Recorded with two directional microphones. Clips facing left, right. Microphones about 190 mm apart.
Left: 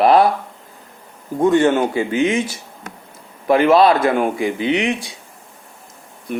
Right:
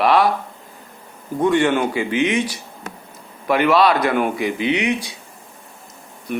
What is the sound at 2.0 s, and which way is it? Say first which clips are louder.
Speech: left 2 dB; 40° left (ahead or behind).